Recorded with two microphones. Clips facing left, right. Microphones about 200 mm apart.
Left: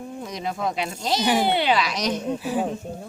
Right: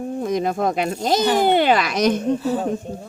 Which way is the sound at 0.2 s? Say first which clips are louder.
Right 8 dB; 50° right (ahead or behind).